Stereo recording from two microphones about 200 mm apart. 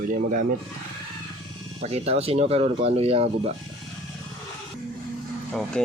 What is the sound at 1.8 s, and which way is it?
Speech, 30° right (ahead or behind).